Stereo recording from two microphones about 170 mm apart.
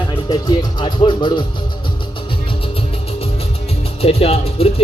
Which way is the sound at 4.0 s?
35° left (ahead or behind).